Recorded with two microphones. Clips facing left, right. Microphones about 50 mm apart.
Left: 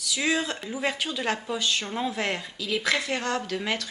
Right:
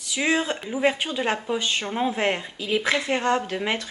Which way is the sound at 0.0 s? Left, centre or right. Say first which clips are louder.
Right 3 dB; right.